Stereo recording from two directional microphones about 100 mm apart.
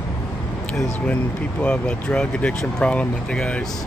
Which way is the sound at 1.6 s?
10° left (ahead or behind).